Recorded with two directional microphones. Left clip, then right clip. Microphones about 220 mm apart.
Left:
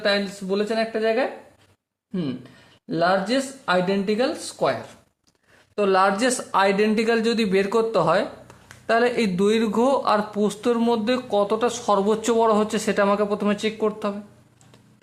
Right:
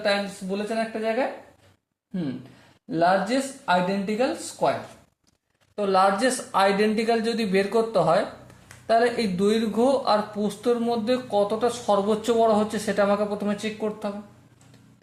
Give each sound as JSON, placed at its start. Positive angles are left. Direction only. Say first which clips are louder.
{"t": 0.0, "sound": "a man's voice", "louder": "left 2 dB", "side_deg": 35}
{"t": 2.9, "sound": "a man's voice", "louder": "left 1 dB", "side_deg": 30}
{"t": 5.7, "sound": "a man's voice", "louder": "left 2 dB", "side_deg": 30}